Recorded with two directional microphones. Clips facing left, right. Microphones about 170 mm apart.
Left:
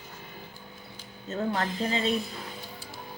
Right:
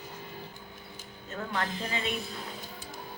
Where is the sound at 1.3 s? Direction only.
35° left (ahead or behind).